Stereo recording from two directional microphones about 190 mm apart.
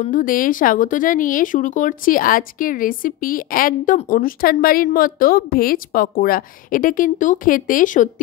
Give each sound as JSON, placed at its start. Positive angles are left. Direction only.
{"t": 0.1, "sound": "speech", "side_deg": 45}